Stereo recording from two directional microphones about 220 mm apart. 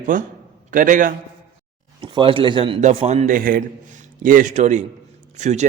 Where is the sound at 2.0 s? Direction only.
25° right (ahead or behind).